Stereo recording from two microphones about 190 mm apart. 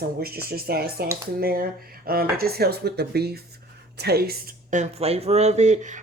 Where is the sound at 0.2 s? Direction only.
55° right (ahead or behind).